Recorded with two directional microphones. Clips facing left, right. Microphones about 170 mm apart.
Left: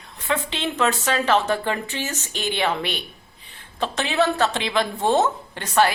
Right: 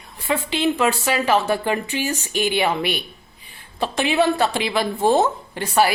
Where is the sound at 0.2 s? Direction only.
10° right (ahead or behind).